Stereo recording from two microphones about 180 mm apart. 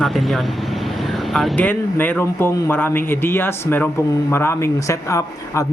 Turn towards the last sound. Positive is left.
turn(degrees=15)  # may be behind; listen again after turning